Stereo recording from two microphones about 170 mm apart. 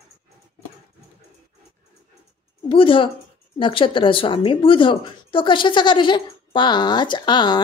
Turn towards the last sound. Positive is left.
turn(degrees=25)  # may be behind; listen again after turning